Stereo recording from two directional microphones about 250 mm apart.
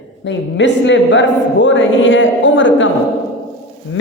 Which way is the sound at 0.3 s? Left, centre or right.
Left.